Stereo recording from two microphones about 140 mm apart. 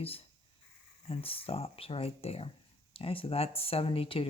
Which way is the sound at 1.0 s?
40° left (ahead or behind).